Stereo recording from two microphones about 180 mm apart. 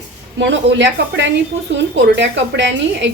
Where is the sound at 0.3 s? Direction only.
80° right.